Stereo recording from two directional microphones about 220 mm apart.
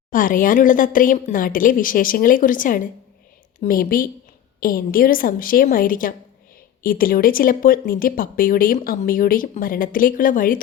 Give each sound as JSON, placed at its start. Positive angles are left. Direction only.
{"t": 0.1, "sound": "speech", "side_deg": 40}